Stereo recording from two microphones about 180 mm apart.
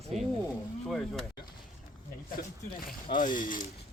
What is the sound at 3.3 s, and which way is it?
Speech, 50° left (ahead or behind).